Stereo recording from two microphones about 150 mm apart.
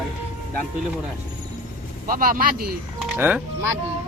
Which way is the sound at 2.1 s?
70° right (ahead or behind).